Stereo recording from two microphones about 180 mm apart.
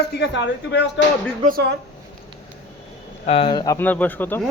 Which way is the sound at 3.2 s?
30° left (ahead or behind).